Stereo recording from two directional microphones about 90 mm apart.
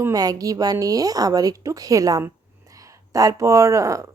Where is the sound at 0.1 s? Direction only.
45° right (ahead or behind).